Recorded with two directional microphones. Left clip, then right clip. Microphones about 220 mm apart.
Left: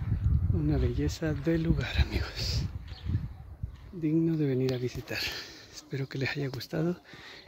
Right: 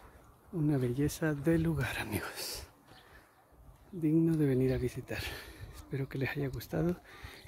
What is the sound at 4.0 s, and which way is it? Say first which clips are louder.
Speech: left 1 dB; 5° right (ahead or behind).